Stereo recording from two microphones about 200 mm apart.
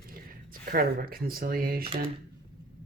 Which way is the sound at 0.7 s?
50° right (ahead or behind).